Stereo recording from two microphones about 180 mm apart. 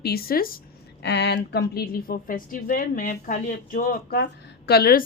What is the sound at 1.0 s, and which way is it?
Speech, 70° left (ahead or behind).